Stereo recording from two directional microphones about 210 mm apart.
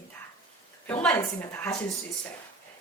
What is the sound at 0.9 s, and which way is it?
Speech, 10° left (ahead or behind).